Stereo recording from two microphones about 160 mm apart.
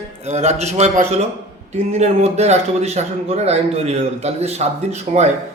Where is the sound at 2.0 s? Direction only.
45° right (ahead or behind).